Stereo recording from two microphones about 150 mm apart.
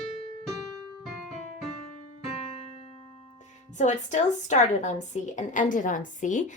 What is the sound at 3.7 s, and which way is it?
Speech, 50° left (ahead or behind).